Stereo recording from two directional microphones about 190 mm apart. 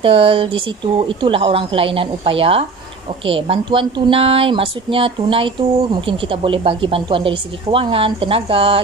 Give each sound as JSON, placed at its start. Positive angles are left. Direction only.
{"t": 0.0, "sound": "speech", "side_deg": -30}